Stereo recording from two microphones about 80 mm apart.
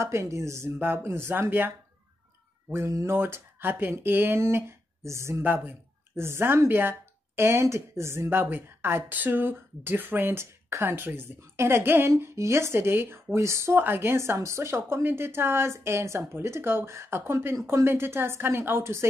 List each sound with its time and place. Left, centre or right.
0.0 s speech: right
2.7 s speech: right
5.4 s speech: right